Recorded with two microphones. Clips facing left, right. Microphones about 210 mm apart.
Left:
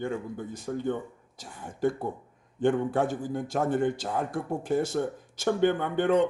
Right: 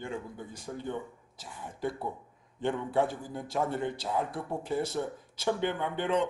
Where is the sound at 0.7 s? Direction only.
60° left (ahead or behind).